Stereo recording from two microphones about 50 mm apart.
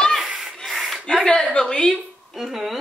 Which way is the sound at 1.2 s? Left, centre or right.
Centre.